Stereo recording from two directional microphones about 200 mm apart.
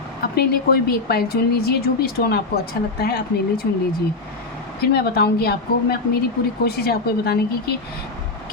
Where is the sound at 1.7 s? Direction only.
50° left (ahead or behind).